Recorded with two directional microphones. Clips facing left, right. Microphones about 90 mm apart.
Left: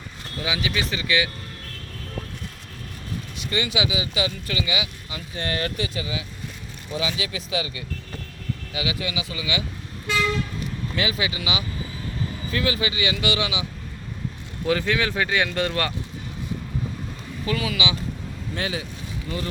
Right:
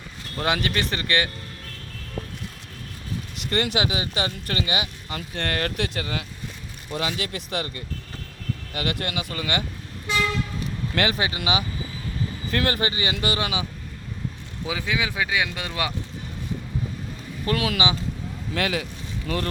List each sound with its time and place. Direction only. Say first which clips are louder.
0.3 s speech: right 3 dB; 55° right (ahead or behind)
3.5 s speech: right 1 dB; 60° right (ahead or behind)
10.9 s speech: right 3 dB; 60° right (ahead or behind)
11.2 s speech: right 2 dB; 45° right (ahead or behind)
12.5 s speech: right 1 dB; 55° right (ahead or behind)
14.7 s speech: left 5 dB; 10° right (ahead or behind)
17.4 s speech: right 2 dB; 55° right (ahead or behind)
18.5 s speech: right 3 dB; 70° right (ahead or behind)